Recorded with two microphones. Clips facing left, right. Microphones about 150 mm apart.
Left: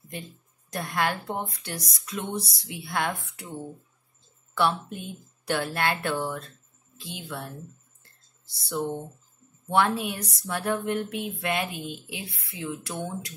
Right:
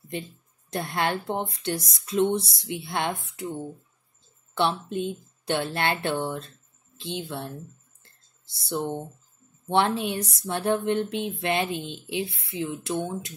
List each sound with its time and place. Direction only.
0.7 s speech: 25° right (ahead or behind)
4.6 s speech: 25° right (ahead or behind)
8.5 s speech: 25° right (ahead or behind)